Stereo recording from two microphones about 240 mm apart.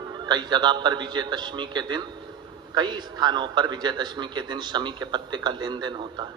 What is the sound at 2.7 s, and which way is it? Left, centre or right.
A man's voice, centre.